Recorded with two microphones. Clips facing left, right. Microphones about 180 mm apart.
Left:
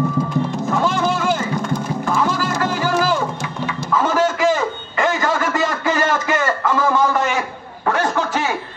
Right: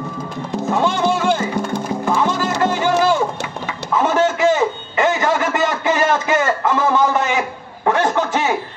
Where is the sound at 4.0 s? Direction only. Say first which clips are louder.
Right 2 dB; 20° right (ahead or behind).